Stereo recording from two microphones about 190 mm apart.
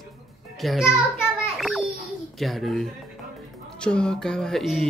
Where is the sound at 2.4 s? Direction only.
Centre (ahead or behind).